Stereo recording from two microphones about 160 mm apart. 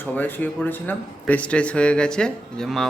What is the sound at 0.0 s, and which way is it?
Speech, 10° left (ahead or behind).